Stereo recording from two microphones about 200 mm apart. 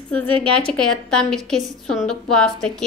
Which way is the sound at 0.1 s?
5° left (ahead or behind).